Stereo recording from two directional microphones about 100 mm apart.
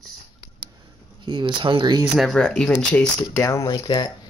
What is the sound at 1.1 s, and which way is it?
Speech, 50° right (ahead or behind).